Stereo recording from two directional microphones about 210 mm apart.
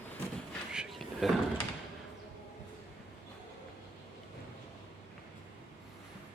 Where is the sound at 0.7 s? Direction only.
Centre (ahead or behind).